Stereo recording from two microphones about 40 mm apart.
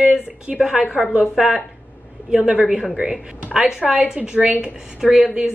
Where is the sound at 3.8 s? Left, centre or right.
Right.